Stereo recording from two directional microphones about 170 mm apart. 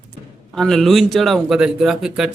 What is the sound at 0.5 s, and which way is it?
A man's voice, centre (ahead or behind).